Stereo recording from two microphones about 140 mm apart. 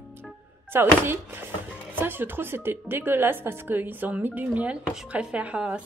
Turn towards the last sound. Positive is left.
turn(degrees=-10)  # may be behind; listen again after turning